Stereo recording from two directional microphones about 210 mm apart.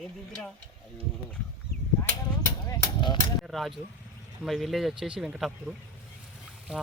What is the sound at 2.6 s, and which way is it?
Speech, 15° left (ahead or behind).